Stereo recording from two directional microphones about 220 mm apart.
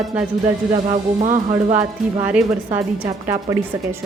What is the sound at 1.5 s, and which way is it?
Speech, 25° right (ahead or behind).